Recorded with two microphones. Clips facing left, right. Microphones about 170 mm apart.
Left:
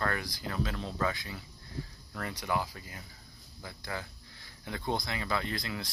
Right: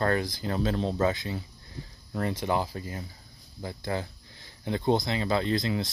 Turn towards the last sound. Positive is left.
turn(degrees=-25)  # may be behind; listen again after turning